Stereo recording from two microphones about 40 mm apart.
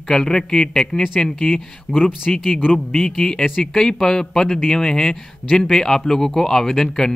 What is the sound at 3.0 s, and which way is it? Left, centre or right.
Speech, centre.